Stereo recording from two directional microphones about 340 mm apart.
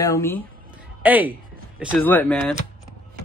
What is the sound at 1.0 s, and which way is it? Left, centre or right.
Speech, centre.